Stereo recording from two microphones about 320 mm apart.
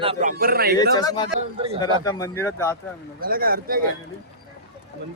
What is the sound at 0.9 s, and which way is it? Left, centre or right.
Speech, centre.